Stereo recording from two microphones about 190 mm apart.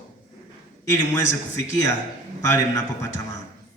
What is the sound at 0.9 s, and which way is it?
A man's voice, 15° left (ahead or behind).